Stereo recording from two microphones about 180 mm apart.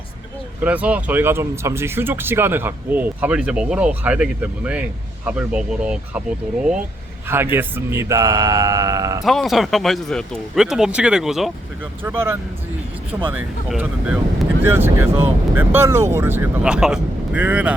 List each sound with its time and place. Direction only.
0.6 s speech: 10° right (ahead or behind)
7.3 s speech: 10° right (ahead or behind)
9.2 s speech: centre (ahead or behind)
12.0 s speech: 15° right (ahead or behind)